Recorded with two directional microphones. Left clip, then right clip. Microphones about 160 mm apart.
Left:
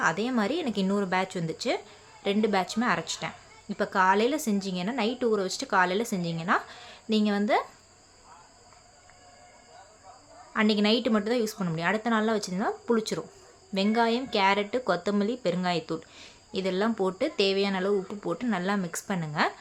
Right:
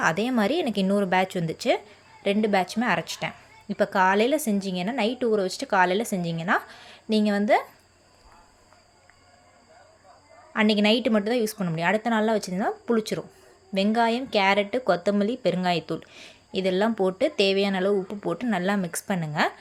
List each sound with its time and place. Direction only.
0.0 s speech: 25° right (ahead or behind)
2.2 s speech: 10° right (ahead or behind)
10.5 s speech: 15° right (ahead or behind)